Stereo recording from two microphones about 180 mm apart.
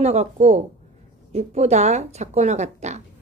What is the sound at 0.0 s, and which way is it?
A woman's voice, 35° right (ahead or behind).